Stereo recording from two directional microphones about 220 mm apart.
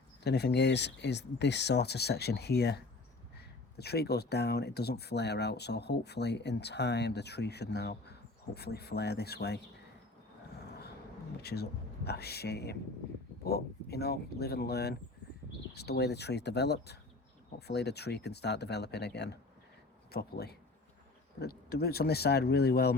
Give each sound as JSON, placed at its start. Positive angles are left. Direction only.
{"t": 0.3, "sound": "speech", "side_deg": 50}
{"t": 12.0, "sound": "speech", "side_deg": 45}